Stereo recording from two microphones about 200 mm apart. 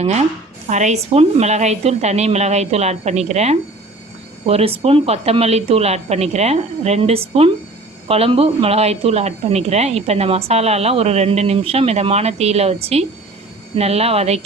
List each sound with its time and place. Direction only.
0.0 s a woman's voice: 35° right (ahead or behind)